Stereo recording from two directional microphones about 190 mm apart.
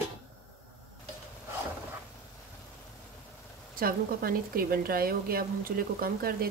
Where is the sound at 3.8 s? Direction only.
50° right (ahead or behind).